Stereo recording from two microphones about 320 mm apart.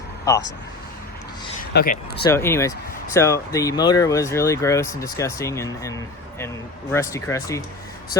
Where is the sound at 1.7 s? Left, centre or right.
Left.